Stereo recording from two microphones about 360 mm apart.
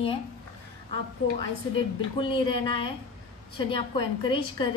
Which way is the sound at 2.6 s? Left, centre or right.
Centre.